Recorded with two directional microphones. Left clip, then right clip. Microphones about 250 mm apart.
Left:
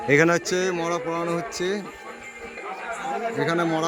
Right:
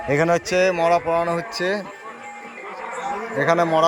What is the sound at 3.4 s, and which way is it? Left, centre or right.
Speech, centre.